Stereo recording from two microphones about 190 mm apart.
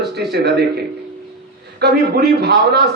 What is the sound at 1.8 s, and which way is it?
A man's voice, 60° right (ahead or behind).